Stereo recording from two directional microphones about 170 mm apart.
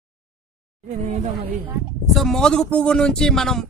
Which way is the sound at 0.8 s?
45° right (ahead or behind).